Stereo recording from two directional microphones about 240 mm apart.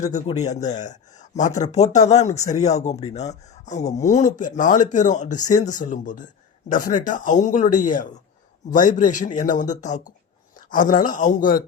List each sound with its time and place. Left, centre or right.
0.1 s speech: left